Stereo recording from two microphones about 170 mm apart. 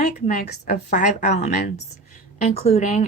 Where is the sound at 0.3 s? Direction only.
45° left (ahead or behind).